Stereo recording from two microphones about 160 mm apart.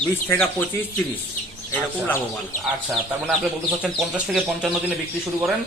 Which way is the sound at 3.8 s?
5° right (ahead or behind).